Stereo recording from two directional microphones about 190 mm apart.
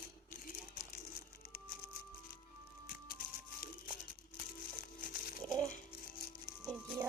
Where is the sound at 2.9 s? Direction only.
50° left (ahead or behind).